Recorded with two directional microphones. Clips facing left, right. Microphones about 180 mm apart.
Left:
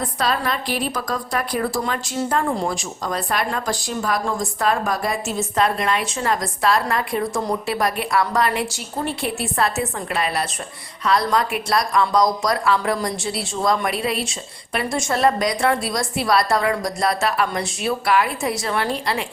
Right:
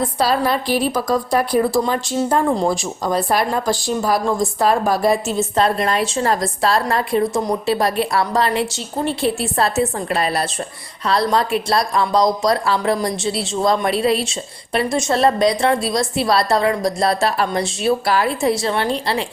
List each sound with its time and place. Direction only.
0.3 s a woman's voice: 30° right (ahead or behind)